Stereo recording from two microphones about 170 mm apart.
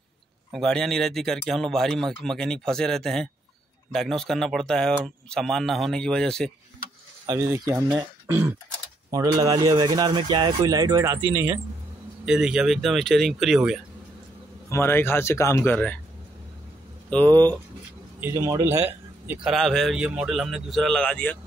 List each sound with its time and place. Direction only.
0.5 s speech: centre (ahead or behind)
7.2 s speech: 15° right (ahead or behind)
12.3 s speech: 5° right (ahead or behind)
14.7 s speech: 15° left (ahead or behind)
17.1 s speech: 10° left (ahead or behind)
18.2 s speech: 20° right (ahead or behind)
19.5 s speech: centre (ahead or behind)